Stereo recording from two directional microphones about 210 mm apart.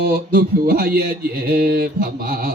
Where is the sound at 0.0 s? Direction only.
45° right (ahead or behind).